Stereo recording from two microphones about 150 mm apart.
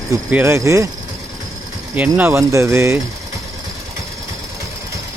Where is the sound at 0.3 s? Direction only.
15° right (ahead or behind).